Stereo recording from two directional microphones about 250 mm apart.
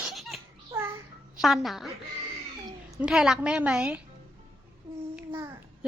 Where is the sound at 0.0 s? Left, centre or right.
Centre.